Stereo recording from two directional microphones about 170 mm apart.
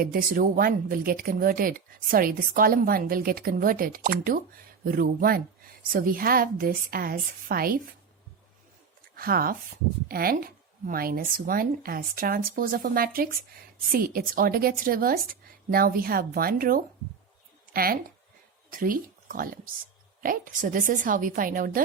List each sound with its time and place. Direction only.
0.0 s speech: 55° right (ahead or behind)
9.1 s a woman's voice: 60° right (ahead or behind)